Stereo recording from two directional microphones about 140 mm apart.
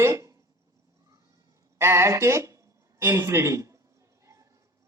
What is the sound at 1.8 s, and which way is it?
Speech, 20° right (ahead or behind).